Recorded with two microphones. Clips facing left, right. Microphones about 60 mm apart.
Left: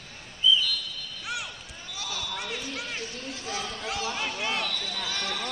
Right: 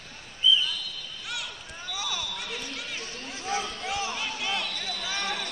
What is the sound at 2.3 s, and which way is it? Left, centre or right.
Basketball bounce, centre.